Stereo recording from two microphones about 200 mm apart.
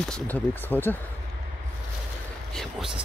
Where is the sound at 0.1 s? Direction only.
10° left (ahead or behind).